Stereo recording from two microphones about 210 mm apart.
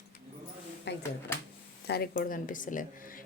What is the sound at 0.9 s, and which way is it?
A woman's voice, 55° left (ahead or behind).